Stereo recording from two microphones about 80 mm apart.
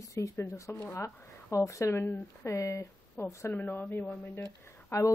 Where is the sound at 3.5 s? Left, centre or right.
Left.